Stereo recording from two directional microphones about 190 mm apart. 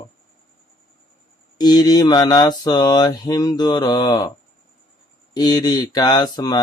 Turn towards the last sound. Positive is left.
turn(degrees=20)  # may be behind; listen again after turning